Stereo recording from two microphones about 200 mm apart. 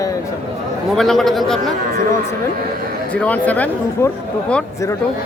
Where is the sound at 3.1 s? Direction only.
5° left (ahead or behind).